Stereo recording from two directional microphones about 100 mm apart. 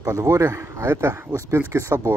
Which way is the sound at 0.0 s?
35° right (ahead or behind).